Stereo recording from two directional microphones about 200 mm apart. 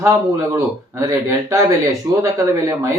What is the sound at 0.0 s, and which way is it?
Speech, 15° right (ahead or behind).